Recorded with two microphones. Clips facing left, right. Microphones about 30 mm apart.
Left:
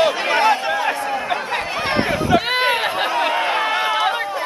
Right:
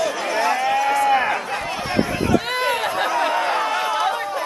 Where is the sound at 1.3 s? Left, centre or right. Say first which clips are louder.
Left 2 dB; left.